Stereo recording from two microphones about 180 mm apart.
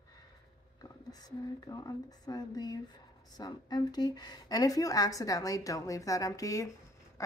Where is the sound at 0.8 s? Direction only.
20° left (ahead or behind).